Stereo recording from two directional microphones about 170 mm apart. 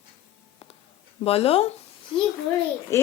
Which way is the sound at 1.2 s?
35° left (ahead or behind).